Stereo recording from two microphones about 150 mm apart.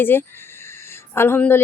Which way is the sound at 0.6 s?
15° left (ahead or behind).